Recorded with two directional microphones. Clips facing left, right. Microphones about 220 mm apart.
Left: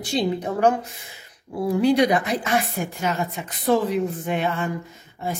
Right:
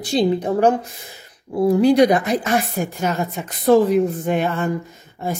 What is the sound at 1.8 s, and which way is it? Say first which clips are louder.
A woman's voice: right 3 dB; 45° right (ahead or behind).